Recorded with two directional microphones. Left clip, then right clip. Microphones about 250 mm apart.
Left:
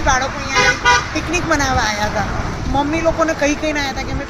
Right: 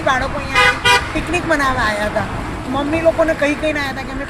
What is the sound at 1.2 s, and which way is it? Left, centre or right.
A woman's voice, centre.